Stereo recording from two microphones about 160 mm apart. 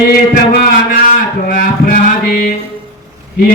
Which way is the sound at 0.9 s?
55° left (ahead or behind).